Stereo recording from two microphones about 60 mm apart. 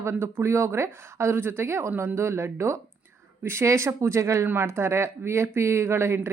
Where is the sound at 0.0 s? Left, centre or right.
Right.